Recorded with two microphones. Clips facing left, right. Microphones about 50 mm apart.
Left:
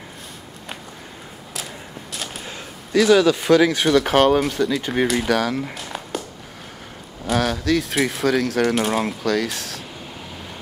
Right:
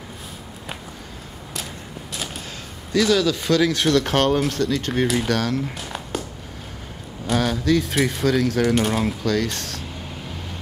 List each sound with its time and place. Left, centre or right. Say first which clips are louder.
2.1 s a sound: even; centre
2.4 s speech: left 1 dB; centre
3.8 s speech: left 3 dB; centre
7.2 s speech: even; centre